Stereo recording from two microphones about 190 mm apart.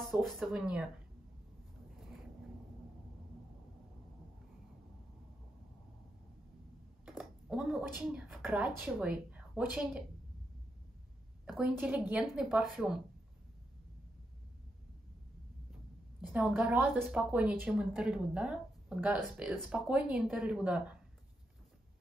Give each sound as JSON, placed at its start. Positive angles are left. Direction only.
{"t": 0.1, "sound": "a woman's voice", "side_deg": 0}
{"t": 7.1, "sound": "computer keyboard", "side_deg": -5}
{"t": 8.0, "sound": "a woman's voice", "side_deg": -5}
{"t": 11.4, "sound": "a woman's voice", "side_deg": -5}
{"t": 16.2, "sound": "a woman's voice", "side_deg": -5}